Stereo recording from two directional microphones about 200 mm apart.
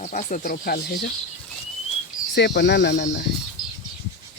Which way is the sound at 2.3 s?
55° left (ahead or behind).